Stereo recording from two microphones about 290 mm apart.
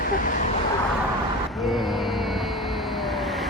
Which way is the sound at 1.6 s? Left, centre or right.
Centre.